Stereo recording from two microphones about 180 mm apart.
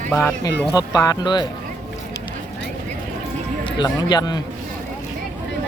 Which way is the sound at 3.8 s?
20° left (ahead or behind).